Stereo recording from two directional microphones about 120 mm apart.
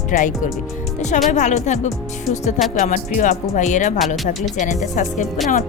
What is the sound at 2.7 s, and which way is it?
Speech, 90° left.